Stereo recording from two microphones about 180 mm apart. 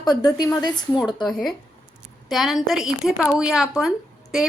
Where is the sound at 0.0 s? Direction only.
20° left (ahead or behind).